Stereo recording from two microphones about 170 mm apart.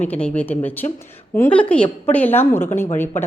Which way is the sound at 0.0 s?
10° left (ahead or behind).